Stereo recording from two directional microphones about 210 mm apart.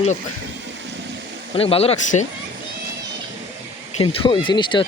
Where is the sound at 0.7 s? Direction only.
60° right (ahead or behind).